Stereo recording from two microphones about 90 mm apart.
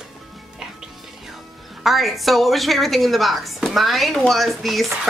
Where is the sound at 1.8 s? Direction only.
Centre (ahead or behind).